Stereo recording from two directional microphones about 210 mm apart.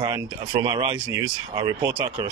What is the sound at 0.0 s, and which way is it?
Speech, 20° right (ahead or behind).